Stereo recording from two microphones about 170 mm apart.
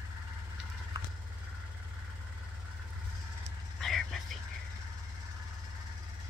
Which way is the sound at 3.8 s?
Centre (ahead or behind).